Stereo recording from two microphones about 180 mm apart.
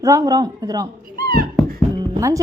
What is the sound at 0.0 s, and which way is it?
Speech, 20° right (ahead or behind).